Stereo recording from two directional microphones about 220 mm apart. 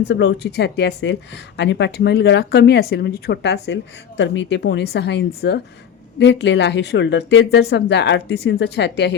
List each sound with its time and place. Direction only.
0.1 s a woman's voice: 55° left (ahead or behind)